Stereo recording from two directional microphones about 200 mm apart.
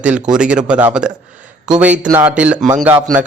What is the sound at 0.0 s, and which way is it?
A man's voice, 5° right (ahead or behind).